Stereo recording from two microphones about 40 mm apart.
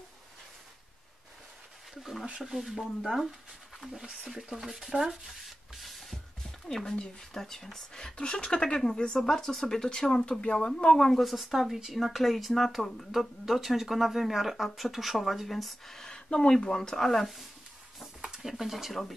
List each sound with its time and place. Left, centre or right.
2.4 s speech: centre
4.1 s rub: centre
6.7 s speech: centre
8.0 s speech: left
11.1 s speech: centre
16.1 s a sound: centre
16.5 s speech: centre
18.4 s speech: centre